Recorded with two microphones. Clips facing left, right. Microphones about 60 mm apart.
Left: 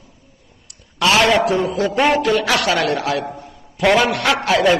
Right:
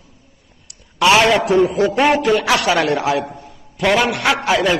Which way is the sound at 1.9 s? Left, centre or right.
Centre.